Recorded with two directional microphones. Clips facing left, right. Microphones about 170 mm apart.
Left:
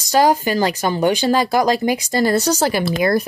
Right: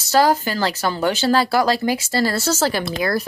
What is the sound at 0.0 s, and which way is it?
Speech, 15° left (ahead or behind).